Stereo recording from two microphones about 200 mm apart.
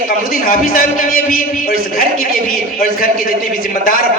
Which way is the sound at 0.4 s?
45° left (ahead or behind).